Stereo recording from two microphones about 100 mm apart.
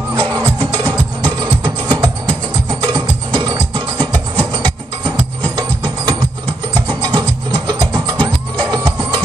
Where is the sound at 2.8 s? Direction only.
45° right (ahead or behind).